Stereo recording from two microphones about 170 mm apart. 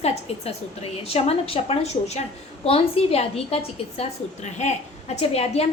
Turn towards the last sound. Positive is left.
turn(degrees=40)  # may be behind; listen again after turning